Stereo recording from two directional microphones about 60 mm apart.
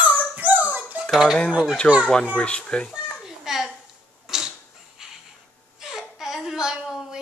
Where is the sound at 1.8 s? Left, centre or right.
Right.